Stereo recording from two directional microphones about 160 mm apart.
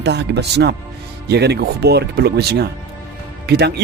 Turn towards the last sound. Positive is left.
turn(degrees=-90)